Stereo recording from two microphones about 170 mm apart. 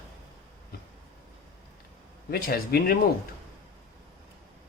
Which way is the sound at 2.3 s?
65° left (ahead or behind).